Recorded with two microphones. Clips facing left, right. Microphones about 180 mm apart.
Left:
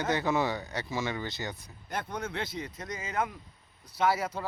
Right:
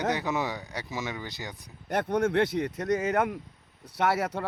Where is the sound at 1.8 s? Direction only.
70° right (ahead or behind).